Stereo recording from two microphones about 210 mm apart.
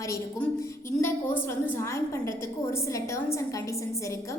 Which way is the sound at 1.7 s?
15° left (ahead or behind).